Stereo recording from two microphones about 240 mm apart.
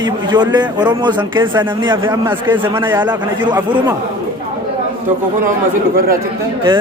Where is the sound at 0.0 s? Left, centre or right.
Centre.